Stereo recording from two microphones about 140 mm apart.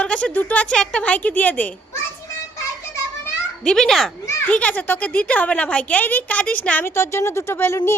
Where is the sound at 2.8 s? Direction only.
20° left (ahead or behind).